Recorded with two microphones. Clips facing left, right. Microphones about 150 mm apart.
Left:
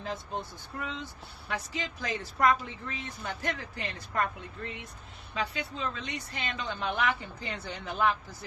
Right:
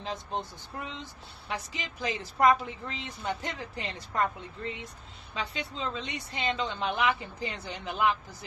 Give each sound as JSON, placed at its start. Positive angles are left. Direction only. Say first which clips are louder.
{"t": 0.0, "sound": "a woman's voice", "louder": "right 1 dB", "side_deg": -20}